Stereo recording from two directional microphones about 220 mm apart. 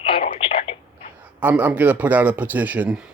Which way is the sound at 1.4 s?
10° right (ahead or behind).